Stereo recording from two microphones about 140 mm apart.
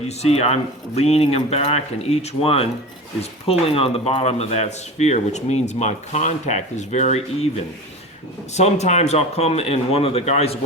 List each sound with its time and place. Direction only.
0.2 s a man's voice: 50° left (ahead or behind)
3.8 s a man's voice: 45° left (ahead or behind)